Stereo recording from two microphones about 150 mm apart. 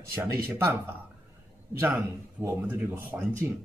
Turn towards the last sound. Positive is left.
turn(degrees=-15)  # may be behind; listen again after turning